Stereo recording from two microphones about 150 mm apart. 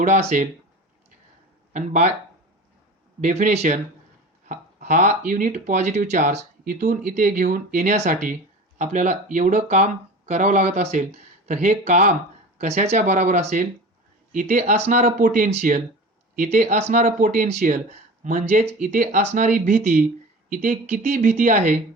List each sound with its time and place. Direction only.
0.0 s speech: 50° right (ahead or behind)
1.7 s speech: 55° right (ahead or behind)
3.2 s speech: 55° right (ahead or behind)